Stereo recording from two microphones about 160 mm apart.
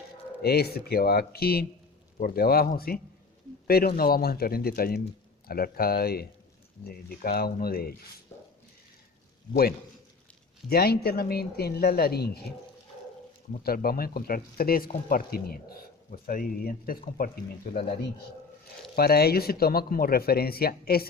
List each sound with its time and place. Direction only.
0.4 s speech: 80° left
9.5 s speech: 70° left (ahead or behind)
13.5 s speech: 65° left (ahead or behind)
18.9 s speech: 75° left (ahead or behind)